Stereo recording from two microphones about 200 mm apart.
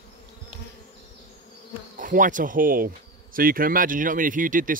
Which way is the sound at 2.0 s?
40° right (ahead or behind).